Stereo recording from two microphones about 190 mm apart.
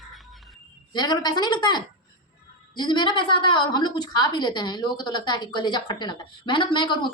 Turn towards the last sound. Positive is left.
turn(degrees=25)  # may be behind; listen again after turning